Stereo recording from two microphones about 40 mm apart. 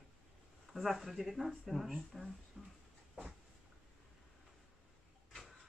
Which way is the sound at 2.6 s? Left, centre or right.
Centre.